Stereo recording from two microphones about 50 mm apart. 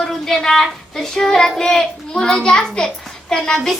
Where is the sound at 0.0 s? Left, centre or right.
Centre.